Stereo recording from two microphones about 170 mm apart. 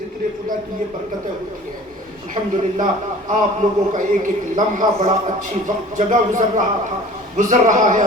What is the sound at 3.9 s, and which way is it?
A man's voice, 50° right (ahead or behind).